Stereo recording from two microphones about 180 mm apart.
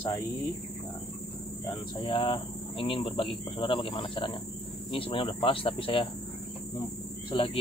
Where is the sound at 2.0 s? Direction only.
30° left (ahead or behind).